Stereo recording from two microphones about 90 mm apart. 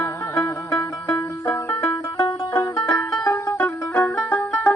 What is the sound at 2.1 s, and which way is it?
Music, 55° left (ahead or behind).